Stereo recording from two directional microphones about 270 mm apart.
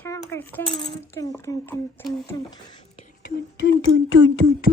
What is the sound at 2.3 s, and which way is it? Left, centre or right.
Whispering, centre.